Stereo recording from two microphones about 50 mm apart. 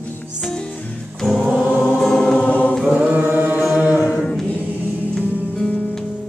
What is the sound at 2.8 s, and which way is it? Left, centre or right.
Chant, right.